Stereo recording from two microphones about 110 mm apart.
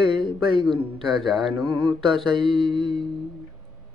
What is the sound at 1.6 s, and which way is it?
Mantra, 45° right (ahead or behind).